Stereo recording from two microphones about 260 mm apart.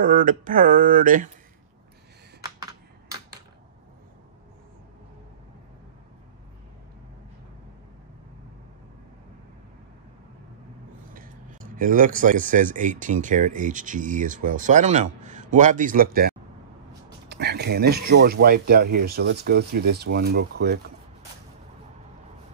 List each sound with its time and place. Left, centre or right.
0.0 s speech: right
11.7 s speech: right